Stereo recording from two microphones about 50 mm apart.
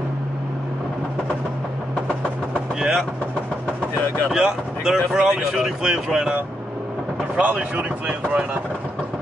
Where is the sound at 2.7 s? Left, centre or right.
Centre.